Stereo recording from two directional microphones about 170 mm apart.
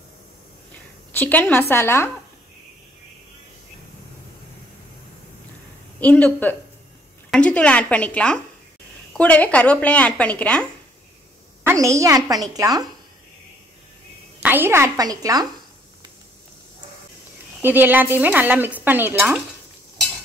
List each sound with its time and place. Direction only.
1.1 s speech: 10° left (ahead or behind)
5.9 s a woman's voice: 10° left (ahead or behind)
11.6 s a woman's voice: 15° right (ahead or behind)
14.4 s speech: 10° right (ahead or behind)
17.6 s speech: 10° right (ahead or behind)